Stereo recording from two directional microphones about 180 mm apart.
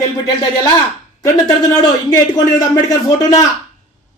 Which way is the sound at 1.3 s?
20° left (ahead or behind).